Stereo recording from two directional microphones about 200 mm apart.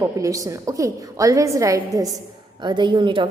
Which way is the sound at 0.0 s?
15° right (ahead or behind).